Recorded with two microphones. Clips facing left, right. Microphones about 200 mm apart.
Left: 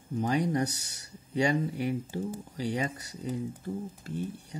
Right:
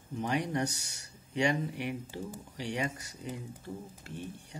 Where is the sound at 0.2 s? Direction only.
35° left (ahead or behind).